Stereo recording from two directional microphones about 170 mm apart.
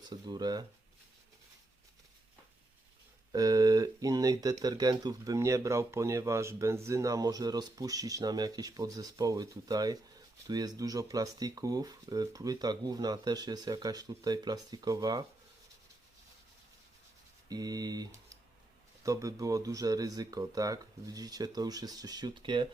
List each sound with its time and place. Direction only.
0.0 s speech: 25° right (ahead or behind)
3.3 s speech: 20° right (ahead or behind)
17.5 s speech: 20° right (ahead or behind)